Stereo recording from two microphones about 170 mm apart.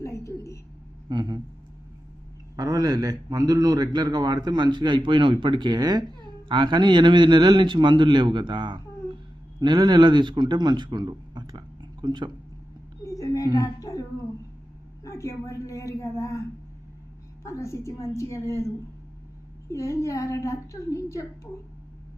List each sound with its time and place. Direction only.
0.0 s a sound: 15° left (ahead or behind)
1.1 s a man's voice: 25° right (ahead or behind)
2.6 s a man's voice: 20° right (ahead or behind)
13.1 s a sound: 20° left (ahead or behind)
15.0 s a woman's voice: 20° left (ahead or behind)
17.4 s a woman's voice: 15° left (ahead or behind)
19.6 s a woman's voice: 15° left (ahead or behind)